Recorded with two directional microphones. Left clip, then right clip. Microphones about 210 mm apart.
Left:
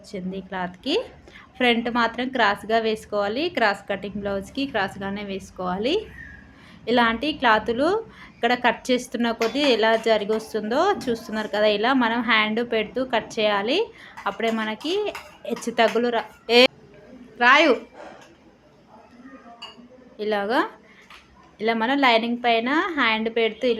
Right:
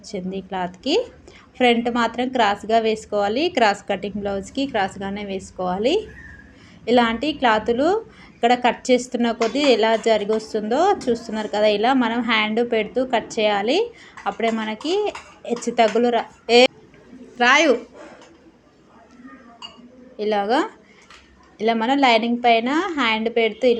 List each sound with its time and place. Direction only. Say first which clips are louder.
0.1 s a woman's voice: right 4 dB; 10° right (ahead or behind)
20.1 s a woman's voice: right 3 dB; 10° right (ahead or behind)